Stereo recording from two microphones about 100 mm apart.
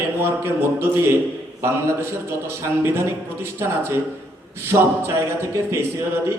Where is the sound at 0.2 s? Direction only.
25° right (ahead or behind).